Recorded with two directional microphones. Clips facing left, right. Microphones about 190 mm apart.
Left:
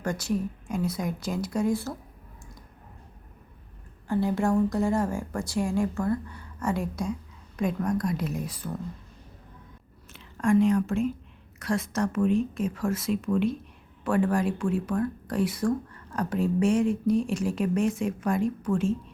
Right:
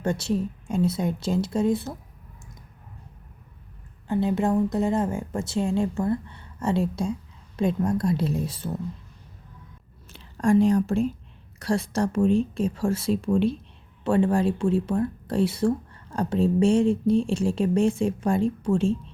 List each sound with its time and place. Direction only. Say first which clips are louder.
0.0 s speech: right 3 dB; 25° right (ahead or behind)
4.1 s speech: right 2 dB; 20° right (ahead or behind)
10.1 s speech: right 2 dB; 35° right (ahead or behind)